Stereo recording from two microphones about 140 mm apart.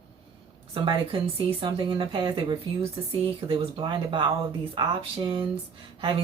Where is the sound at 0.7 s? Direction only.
40° right (ahead or behind).